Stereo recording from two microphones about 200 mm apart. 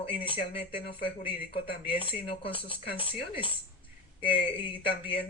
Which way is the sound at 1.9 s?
25° left (ahead or behind).